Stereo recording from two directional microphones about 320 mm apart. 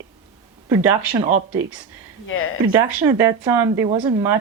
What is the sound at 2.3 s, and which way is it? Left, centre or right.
Speech, left.